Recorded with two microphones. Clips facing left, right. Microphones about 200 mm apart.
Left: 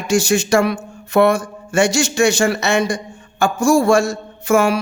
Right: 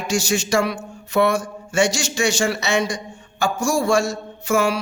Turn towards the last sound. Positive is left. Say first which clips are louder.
# left 4 dB
turn(degrees=55)  # may be behind; listen again after turning